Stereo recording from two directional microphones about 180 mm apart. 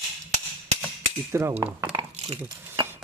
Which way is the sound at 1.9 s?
30° right (ahead or behind).